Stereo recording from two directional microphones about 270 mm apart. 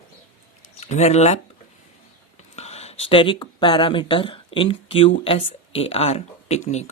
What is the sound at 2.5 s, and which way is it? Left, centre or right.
Speech, left.